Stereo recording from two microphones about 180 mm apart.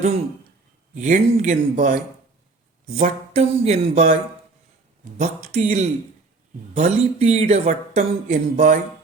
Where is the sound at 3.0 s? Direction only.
35° right (ahead or behind).